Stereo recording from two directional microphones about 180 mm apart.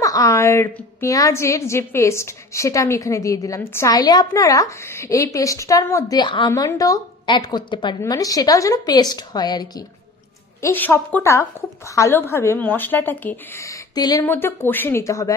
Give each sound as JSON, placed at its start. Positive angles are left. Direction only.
{"t": 0.0, "sound": "a woman's voice", "side_deg": 20}